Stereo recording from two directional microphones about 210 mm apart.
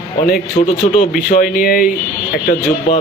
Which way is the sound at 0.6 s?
40° left (ahead or behind).